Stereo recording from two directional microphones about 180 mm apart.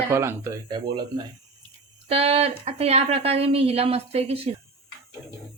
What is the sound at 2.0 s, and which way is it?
A woman's voice, 35° right (ahead or behind).